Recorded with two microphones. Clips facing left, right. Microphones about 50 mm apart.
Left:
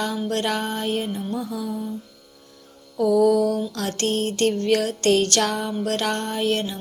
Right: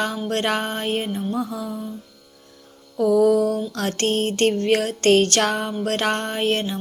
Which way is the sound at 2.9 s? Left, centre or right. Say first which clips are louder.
Right 1 dB; right.